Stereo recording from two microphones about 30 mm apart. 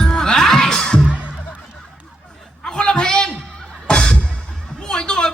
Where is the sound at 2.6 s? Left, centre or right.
Left.